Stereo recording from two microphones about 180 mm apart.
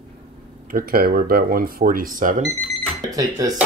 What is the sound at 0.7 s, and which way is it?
Speech, 55° right (ahead or behind).